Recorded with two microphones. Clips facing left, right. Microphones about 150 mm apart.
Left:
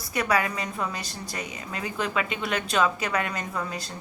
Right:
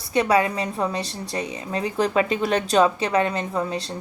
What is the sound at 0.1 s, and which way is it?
A woman's voice, 25° right (ahead or behind).